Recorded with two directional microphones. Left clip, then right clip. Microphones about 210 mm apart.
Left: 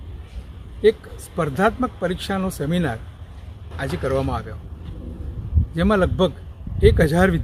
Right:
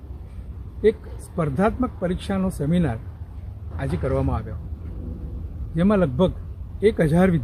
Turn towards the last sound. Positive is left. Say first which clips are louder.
# left 2 dB
turn(degrees=0)  # may be behind; listen again after turning